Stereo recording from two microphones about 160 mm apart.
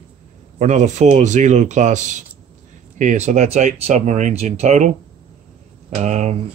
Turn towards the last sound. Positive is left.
turn(degrees=-45)  # may be behind; listen again after turning